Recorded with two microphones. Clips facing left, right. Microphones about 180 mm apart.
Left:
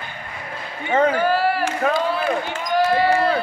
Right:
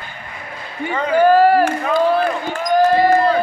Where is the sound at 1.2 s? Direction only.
45° right (ahead or behind).